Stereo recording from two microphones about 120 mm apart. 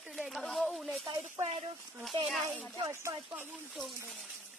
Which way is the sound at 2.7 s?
25° right (ahead or behind).